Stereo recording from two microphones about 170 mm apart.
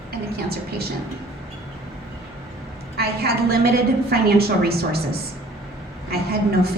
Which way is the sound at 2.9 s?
65° right (ahead or behind).